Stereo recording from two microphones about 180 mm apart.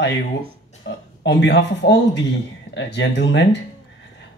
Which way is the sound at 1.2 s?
75° left (ahead or behind).